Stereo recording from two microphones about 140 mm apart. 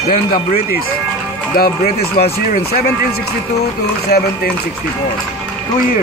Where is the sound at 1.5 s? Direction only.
90° left.